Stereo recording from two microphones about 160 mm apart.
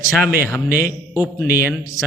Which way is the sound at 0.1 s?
5° right (ahead or behind).